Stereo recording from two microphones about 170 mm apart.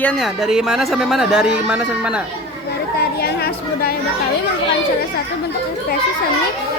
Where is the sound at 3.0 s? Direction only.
65° left (ahead or behind).